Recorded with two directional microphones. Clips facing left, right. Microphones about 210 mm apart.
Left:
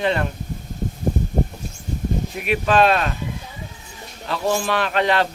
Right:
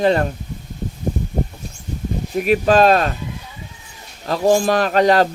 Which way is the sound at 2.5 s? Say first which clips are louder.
Right 4 dB; 40° right (ahead or behind).